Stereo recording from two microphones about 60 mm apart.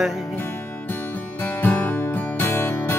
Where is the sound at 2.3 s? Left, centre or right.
Left.